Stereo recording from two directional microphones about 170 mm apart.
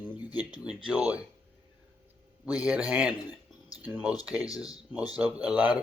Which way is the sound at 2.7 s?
5° right (ahead or behind).